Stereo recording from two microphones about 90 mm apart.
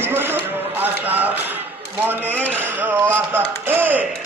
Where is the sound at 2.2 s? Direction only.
15° left (ahead or behind).